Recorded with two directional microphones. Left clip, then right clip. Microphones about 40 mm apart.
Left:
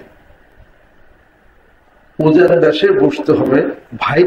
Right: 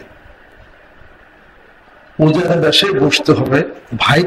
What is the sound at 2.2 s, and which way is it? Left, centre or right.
A man's voice, right.